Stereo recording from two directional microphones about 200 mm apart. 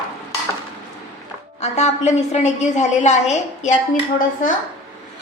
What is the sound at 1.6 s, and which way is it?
A woman's voice, 35° left (ahead or behind).